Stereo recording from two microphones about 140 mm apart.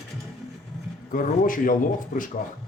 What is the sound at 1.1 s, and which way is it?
Speech, 75° left (ahead or behind).